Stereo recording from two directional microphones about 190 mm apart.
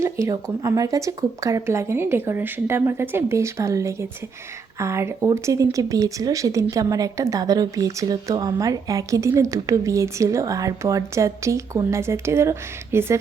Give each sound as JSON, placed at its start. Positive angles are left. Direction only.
{"t": 0.0, "sound": "speech", "side_deg": -15}